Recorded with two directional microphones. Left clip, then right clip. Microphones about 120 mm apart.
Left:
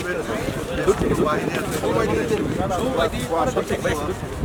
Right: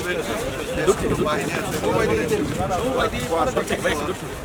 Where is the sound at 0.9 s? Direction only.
5° right (ahead or behind).